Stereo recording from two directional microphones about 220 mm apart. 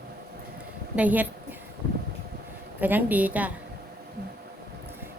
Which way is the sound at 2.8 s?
10° right (ahead or behind).